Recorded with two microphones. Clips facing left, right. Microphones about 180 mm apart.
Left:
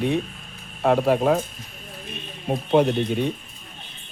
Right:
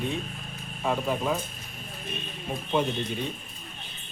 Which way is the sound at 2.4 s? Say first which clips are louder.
Left 8 dB; 60° left (ahead or behind).